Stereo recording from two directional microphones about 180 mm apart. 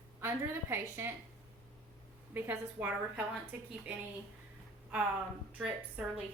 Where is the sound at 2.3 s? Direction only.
10° right (ahead or behind).